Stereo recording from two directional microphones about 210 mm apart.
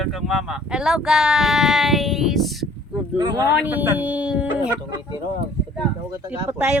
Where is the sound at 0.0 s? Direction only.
Centre (ahead or behind).